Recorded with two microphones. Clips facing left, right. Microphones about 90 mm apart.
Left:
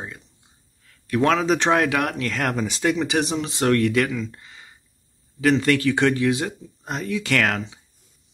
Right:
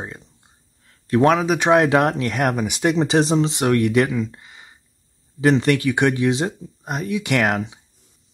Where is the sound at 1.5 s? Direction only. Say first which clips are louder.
Right 2 dB; 10° right (ahead or behind).